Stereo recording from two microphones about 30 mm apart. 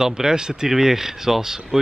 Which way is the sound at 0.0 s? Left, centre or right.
Right.